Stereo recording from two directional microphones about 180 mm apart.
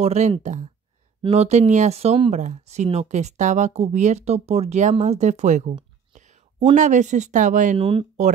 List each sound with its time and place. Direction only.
0.0 s speech: 35° right (ahead or behind)
7.7 s speech: 30° right (ahead or behind)